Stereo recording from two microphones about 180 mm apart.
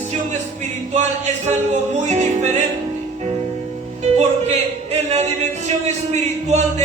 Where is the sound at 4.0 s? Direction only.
35° right (ahead or behind).